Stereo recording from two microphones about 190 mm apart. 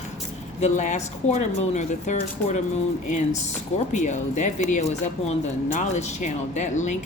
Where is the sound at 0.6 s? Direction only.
40° left (ahead or behind).